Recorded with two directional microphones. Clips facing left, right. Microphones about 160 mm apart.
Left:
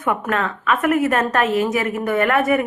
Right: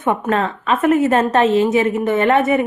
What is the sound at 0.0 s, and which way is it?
A woman's voice, 25° right (ahead or behind).